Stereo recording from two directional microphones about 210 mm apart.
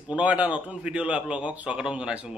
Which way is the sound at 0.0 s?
5° right (ahead or behind).